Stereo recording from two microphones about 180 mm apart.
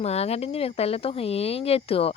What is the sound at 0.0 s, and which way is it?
Speech, 35° left (ahead or behind).